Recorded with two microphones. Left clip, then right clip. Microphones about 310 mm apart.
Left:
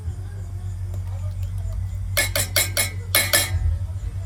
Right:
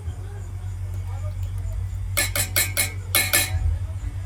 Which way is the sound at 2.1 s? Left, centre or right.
Centre.